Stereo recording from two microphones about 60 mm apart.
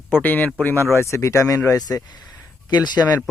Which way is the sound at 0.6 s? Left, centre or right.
Left.